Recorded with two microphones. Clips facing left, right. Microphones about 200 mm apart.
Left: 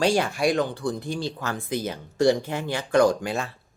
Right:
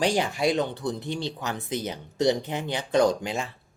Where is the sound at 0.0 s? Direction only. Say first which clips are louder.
Left 2 dB; 20° right (ahead or behind).